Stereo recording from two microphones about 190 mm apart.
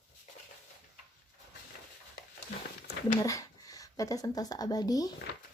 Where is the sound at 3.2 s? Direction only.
15° left (ahead or behind).